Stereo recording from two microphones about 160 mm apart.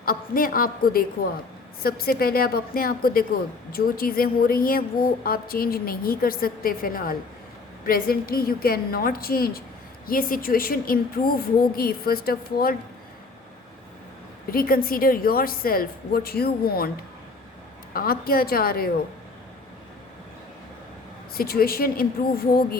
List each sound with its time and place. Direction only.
0.0 s a woman's voice: 65° left (ahead or behind)
14.5 s a woman's voice: 65° left (ahead or behind)
17.9 s a woman's voice: 65° left (ahead or behind)
21.3 s a woman's voice: 70° left (ahead or behind)